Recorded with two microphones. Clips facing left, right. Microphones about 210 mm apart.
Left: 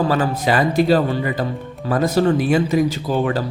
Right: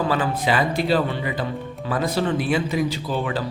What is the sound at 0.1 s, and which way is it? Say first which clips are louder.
A man's voice: left 3 dB; 45° left (ahead or behind).